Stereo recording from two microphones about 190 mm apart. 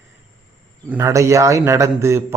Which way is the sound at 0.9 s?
15° right (ahead or behind).